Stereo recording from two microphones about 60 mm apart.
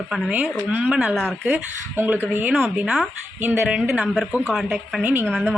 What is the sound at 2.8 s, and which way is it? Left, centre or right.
Speech, centre.